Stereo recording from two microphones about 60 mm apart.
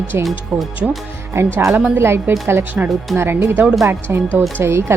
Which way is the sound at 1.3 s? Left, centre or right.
Right.